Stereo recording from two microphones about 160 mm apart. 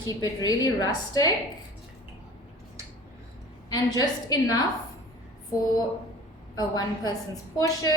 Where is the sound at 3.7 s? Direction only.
25° left (ahead or behind).